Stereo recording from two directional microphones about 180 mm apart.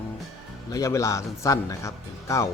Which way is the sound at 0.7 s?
15° left (ahead or behind).